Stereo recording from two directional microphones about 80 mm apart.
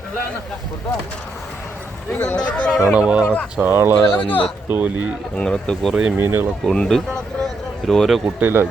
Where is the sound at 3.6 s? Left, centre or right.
Right.